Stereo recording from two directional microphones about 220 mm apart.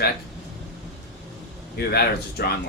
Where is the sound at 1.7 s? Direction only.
45° left (ahead or behind).